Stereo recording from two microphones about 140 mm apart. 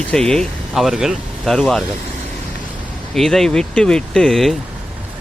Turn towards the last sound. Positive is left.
turn(degrees=0)  # may be behind; listen again after turning